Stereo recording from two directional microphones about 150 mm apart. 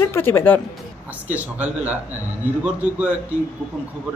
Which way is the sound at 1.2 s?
10° right (ahead or behind).